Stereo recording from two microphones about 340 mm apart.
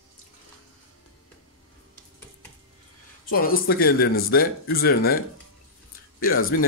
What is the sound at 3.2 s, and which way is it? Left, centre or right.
Speech, left.